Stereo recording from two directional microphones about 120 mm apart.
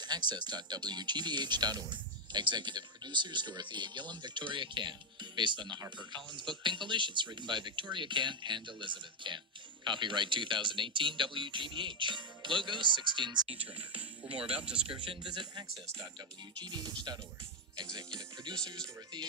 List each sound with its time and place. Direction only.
0.0 s speech: 35° right (ahead or behind)
16.6 s speech: 35° right (ahead or behind)